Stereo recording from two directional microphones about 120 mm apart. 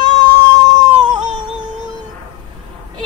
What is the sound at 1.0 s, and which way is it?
Music, 40° right (ahead or behind).